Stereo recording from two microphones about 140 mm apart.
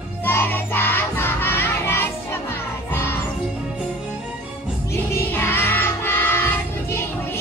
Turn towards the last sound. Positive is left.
turn(degrees=15)  # may be behind; listen again after turning